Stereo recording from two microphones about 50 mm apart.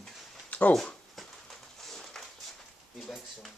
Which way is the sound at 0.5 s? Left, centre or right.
Left.